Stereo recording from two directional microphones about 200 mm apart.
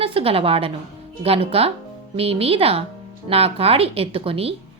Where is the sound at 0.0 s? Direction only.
30° right (ahead or behind).